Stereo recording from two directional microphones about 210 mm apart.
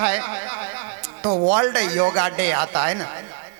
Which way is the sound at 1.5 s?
10° right (ahead or behind).